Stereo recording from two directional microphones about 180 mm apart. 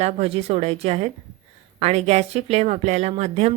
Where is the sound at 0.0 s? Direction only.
35° right (ahead or behind).